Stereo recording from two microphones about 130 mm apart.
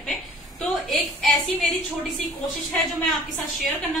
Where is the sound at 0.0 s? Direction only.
5° left (ahead or behind).